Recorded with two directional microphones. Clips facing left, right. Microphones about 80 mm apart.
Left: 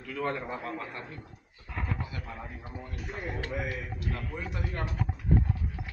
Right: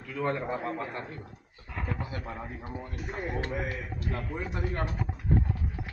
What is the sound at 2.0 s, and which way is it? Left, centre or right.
Speech, right.